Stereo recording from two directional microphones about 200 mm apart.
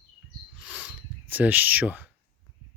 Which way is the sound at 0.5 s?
5° right (ahead or behind).